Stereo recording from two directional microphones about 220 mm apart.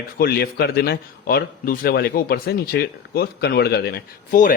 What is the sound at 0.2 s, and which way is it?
A man's voice, 45° left (ahead or behind).